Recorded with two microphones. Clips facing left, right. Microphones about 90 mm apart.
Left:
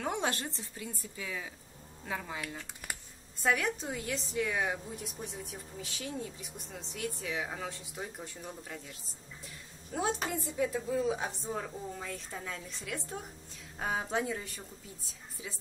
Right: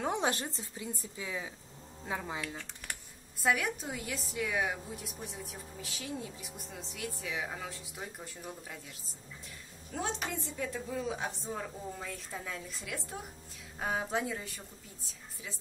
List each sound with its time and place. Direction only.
0.0 s a sound: 20° right (ahead or behind)
0.6 s speech: 20° right (ahead or behind)
2.4 s speech: 10° left (ahead or behind)
3.4 s a woman's voice: 5° right (ahead or behind)
9.9 s a woman's voice: 10° left (ahead or behind)